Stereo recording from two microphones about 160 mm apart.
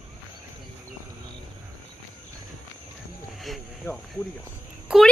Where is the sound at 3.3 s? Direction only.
Centre (ahead or behind).